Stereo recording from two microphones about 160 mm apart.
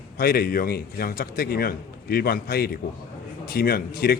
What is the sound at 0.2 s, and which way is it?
Speech, 70° left (ahead or behind).